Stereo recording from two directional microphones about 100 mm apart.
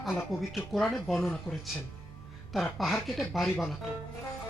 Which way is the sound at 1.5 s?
25° left (ahead or behind).